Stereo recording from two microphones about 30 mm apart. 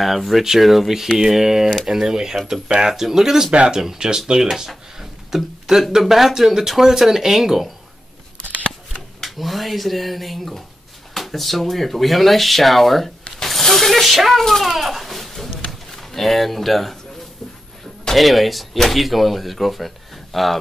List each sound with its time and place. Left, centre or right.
0.0 s speech: centre
9.2 s speech: centre
11.1 s a sound: centre
11.7 s speech: centre
14.6 s a sound: centre
15.9 s speech: centre
18.1 s speech: centre